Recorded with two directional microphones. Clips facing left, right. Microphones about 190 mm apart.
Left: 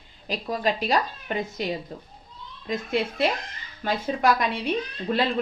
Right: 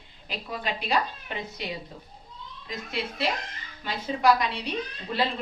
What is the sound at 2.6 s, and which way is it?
A woman's voice, 50° left (ahead or behind).